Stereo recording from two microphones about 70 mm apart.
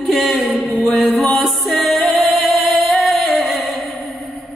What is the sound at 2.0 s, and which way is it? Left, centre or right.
Music, left.